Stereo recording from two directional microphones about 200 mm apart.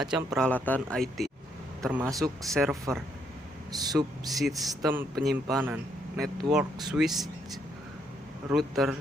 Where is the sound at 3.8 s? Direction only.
20° right (ahead or behind).